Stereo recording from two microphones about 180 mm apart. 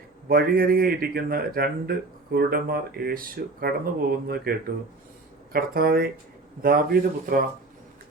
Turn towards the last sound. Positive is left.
turn(degrees=-55)  # may be behind; listen again after turning